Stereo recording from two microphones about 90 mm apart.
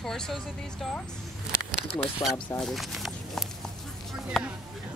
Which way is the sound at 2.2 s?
45° left (ahead or behind).